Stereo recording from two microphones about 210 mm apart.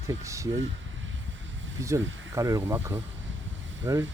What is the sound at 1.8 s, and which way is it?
Speech, 15° right (ahead or behind).